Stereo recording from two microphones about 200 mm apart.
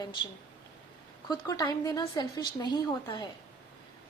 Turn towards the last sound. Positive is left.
turn(degrees=25)  # may be behind; listen again after turning